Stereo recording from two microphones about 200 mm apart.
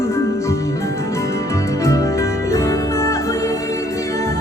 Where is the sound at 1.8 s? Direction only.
15° left (ahead or behind).